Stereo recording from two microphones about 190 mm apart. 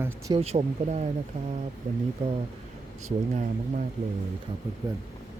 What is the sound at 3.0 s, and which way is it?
Speech, 40° right (ahead or behind).